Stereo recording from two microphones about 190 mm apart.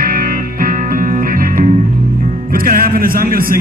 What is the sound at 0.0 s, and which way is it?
Music, 50° right (ahead or behind).